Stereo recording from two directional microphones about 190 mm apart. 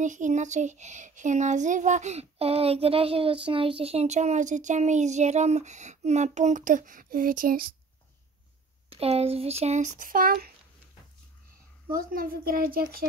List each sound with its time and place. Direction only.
0.0 s a child's voice: 40° right (ahead or behind)
8.9 s a child's voice: 30° right (ahead or behind); by 10.5 s 50° right (ahead or behind)
11.9 s a child's voice: 45° right (ahead or behind)